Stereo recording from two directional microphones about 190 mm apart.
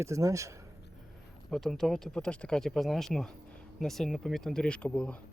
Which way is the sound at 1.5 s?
Centre (ahead or behind).